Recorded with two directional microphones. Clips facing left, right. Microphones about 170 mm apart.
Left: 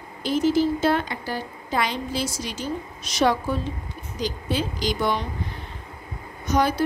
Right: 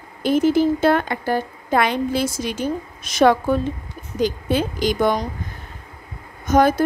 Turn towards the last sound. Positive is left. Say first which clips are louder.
# right 6 dB
turn(degrees=-50)  # may be behind; listen again after turning